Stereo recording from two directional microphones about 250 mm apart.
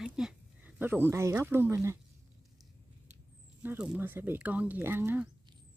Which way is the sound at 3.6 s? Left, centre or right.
Centre.